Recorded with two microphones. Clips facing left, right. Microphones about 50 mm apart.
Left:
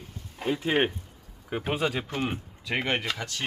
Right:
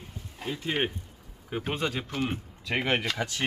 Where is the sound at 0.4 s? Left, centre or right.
Centre.